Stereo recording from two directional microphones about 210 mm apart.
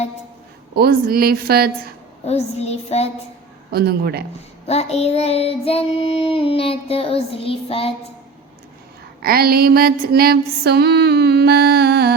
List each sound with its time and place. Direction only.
0.8 s music: 45° right (ahead or behind)
2.2 s child singing: 30° left (ahead or behind)
3.7 s music: 50° right (ahead or behind)
4.6 s child singing: 30° left (ahead or behind)
9.2 s music: 45° right (ahead or behind)